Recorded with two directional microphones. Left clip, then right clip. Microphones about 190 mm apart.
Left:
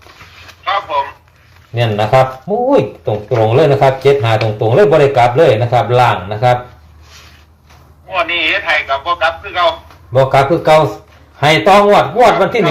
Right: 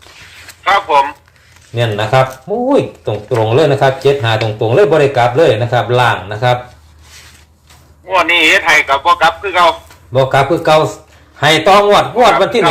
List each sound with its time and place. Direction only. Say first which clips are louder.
0.6 s a sound: right 5 dB; 35° right (ahead or behind)
1.7 s speech: left 1 dB; 15° right (ahead or behind)
8.0 s a man's voice: right 5 dB; 35° right (ahead or behind)
10.2 s speech: left 1 dB; 20° right (ahead or behind)